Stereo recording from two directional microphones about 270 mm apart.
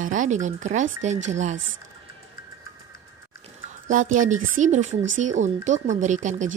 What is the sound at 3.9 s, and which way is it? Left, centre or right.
Speech, right.